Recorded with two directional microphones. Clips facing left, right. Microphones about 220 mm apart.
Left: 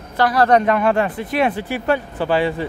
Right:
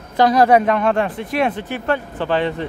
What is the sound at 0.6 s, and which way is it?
Speech, 5° left (ahead or behind).